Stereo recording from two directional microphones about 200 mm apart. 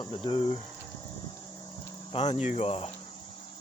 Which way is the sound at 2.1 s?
30° left (ahead or behind).